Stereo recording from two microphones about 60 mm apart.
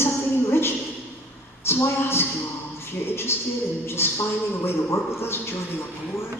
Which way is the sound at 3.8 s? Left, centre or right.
Left.